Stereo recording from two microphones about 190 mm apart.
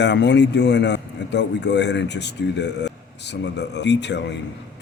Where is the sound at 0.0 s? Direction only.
65° left (ahead or behind).